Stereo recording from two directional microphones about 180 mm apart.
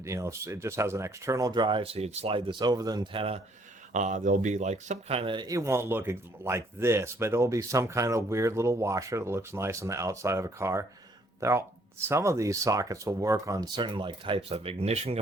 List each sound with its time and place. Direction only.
0.0 s speech: 15° right (ahead or behind); by 3.4 s 30° right (ahead or behind)
3.9 s speech: 40° right (ahead or behind)